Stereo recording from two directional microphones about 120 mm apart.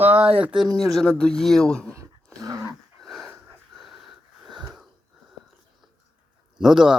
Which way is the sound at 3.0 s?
Centre (ahead or behind).